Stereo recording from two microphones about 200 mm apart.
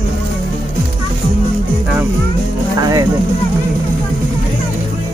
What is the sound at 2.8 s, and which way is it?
Speech, 15° right (ahead or behind).